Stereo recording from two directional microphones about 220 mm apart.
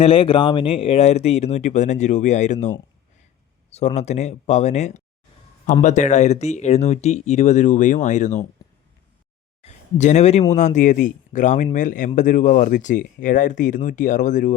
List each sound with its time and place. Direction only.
0.0 s speech: 25° left (ahead or behind)
9.6 s speech: 30° left (ahead or behind)